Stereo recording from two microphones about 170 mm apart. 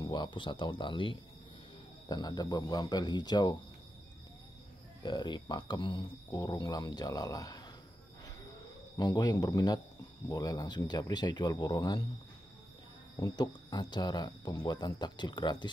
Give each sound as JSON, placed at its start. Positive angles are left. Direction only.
{"t": 0.0, "sound": "speech", "side_deg": 25}
{"t": 5.0, "sound": "speech", "side_deg": 25}
{"t": 8.9, "sound": "speech", "side_deg": 25}
{"t": 13.2, "sound": "speech", "side_deg": 25}